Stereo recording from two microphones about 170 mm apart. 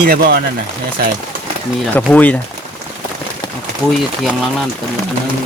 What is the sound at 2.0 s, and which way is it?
Speech, 10° left (ahead or behind).